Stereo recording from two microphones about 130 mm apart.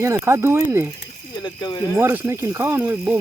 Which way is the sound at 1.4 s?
30° left (ahead or behind).